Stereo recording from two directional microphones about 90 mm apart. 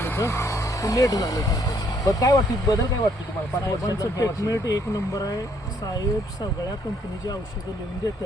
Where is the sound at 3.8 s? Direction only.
40° left (ahead or behind).